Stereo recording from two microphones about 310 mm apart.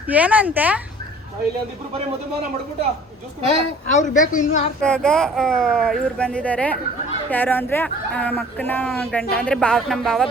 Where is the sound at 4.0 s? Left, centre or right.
Left.